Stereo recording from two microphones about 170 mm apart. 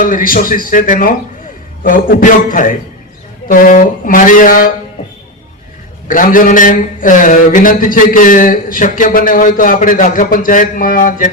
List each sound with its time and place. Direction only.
0.0 s a man's voice: 55° left (ahead or behind)
6.1 s a man's voice: 55° left (ahead or behind)